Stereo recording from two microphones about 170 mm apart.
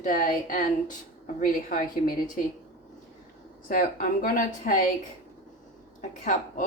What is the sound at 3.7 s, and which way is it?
A woman's voice, 55° left (ahead or behind).